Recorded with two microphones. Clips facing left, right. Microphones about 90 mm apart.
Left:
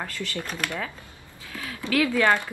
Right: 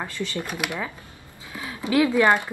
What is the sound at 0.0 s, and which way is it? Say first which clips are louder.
Speech: right 3 dB; 20° right (ahead or behind).